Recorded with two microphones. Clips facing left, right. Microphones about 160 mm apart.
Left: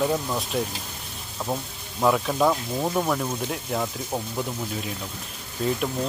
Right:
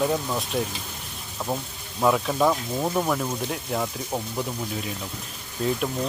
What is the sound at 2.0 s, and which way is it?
Speech, centre (ahead or behind).